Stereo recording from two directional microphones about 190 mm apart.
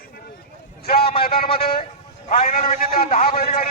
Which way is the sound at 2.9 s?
50° left (ahead or behind).